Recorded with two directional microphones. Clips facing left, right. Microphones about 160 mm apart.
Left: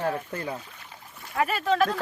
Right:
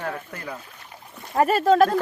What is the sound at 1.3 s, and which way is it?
Speech, 40° right (ahead or behind).